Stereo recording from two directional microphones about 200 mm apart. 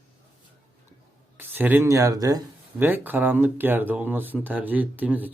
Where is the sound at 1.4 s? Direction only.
10° right (ahead or behind).